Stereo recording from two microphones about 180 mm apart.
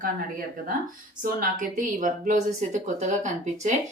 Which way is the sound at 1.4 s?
50° right (ahead or behind).